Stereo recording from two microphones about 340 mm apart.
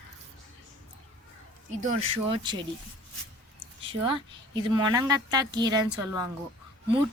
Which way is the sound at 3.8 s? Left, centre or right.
Centre.